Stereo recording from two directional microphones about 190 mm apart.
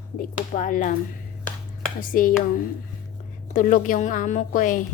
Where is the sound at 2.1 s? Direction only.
45° left (ahead or behind).